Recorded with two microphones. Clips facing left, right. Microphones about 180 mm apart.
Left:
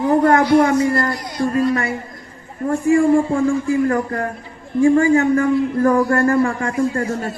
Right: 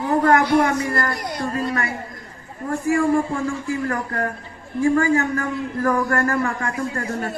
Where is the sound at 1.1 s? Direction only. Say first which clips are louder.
Left 1 dB; 55° right (ahead or behind).